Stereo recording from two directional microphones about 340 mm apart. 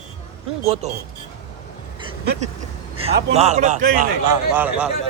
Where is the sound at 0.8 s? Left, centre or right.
Centre.